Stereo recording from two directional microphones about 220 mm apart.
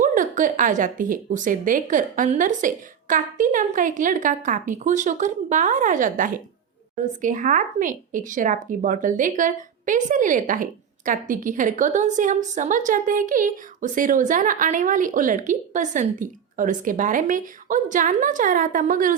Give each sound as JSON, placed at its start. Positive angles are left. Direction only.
{"t": 0.0, "sound": "a woman's voice", "side_deg": -35}